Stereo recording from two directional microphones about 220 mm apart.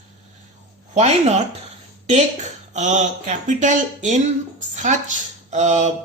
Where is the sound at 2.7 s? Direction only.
35° right (ahead or behind).